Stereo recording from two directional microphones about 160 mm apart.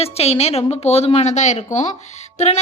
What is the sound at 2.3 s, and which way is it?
Music, 45° left (ahead or behind).